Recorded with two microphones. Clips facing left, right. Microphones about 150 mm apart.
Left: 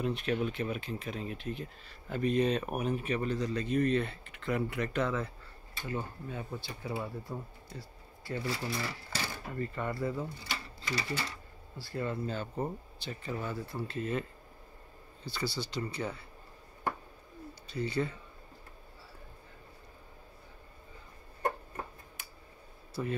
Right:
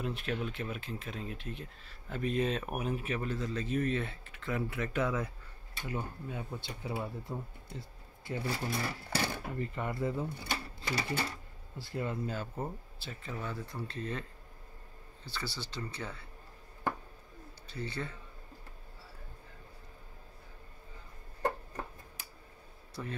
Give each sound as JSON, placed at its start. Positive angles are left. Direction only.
{"t": 0.0, "sound": "speech", "side_deg": 0}
{"t": 8.6, "sound": "speech", "side_deg": -55}
{"t": 9.6, "sound": "speech", "side_deg": -15}
{"t": 10.4, "sound": "sewing machine", "side_deg": -55}
{"t": 11.8, "sound": "speech", "side_deg": -15}
{"t": 12.5, "sound": "speech", "side_deg": 0}
{"t": 15.2, "sound": "speech", "side_deg": 15}
{"t": 17.7, "sound": "speech", "side_deg": 10}
{"t": 23.0, "sound": "speech", "side_deg": 10}